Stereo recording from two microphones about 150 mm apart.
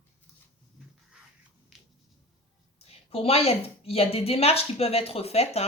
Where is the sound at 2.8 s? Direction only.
40° left (ahead or behind).